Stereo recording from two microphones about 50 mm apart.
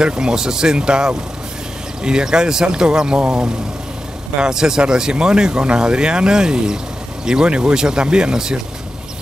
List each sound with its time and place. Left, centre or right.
0.0 s speech: centre